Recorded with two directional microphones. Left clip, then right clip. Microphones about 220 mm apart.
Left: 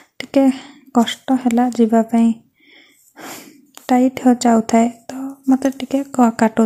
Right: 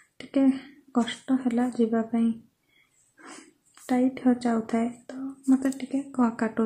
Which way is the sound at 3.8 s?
40° left (ahead or behind).